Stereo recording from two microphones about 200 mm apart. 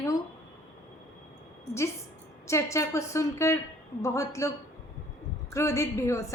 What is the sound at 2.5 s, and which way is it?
A woman's voice, 15° left (ahead or behind).